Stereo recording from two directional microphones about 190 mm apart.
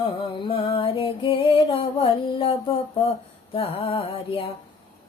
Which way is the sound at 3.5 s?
30° left (ahead or behind).